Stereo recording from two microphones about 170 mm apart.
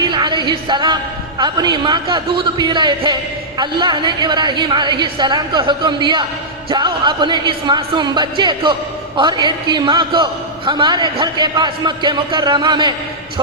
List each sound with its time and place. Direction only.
0.0 s music: 25° right (ahead or behind)
1.4 s a woman's voice: 25° right (ahead or behind)